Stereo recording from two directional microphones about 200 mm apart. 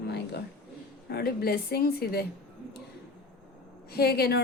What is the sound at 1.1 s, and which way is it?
A woman's voice, 50° left (ahead or behind).